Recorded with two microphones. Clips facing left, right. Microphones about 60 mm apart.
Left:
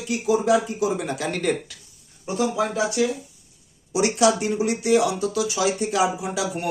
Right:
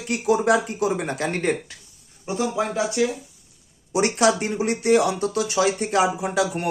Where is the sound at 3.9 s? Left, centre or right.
Right.